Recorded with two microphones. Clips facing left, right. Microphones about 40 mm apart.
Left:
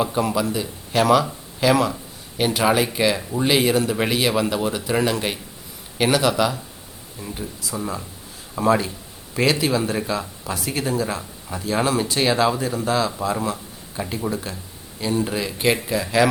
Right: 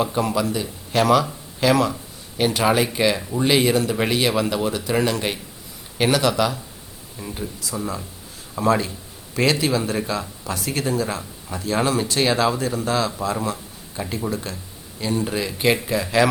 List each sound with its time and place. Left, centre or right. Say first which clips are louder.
0.0 s speech: even; centre